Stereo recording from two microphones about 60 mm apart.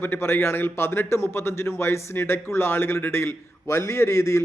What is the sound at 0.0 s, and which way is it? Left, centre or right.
A man's voice, left.